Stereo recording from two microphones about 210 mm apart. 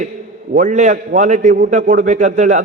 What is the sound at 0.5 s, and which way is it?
A man's voice, 35° right (ahead or behind).